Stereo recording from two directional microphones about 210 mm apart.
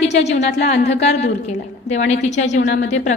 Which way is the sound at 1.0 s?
30° left (ahead or behind).